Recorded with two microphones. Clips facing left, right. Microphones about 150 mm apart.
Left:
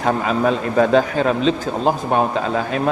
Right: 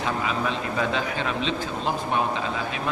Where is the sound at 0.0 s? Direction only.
50° left (ahead or behind).